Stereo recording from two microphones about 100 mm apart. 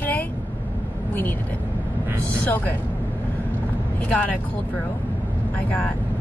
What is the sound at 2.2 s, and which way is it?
Speech, 15° left (ahead or behind).